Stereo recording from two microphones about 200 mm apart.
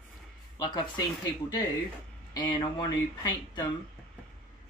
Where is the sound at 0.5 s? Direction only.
20° left (ahead or behind).